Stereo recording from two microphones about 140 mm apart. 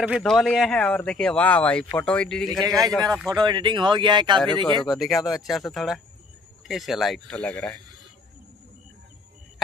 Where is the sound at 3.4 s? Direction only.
35° right (ahead or behind).